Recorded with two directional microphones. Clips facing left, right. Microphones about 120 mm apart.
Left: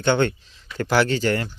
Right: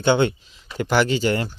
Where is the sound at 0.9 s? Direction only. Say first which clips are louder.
Even; centre (ahead or behind).